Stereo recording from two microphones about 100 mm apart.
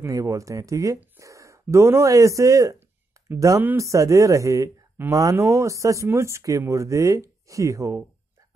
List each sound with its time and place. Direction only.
0.0 s speech: 30° right (ahead or behind)